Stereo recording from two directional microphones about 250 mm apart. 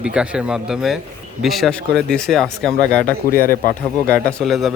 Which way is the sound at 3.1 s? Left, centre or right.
Left.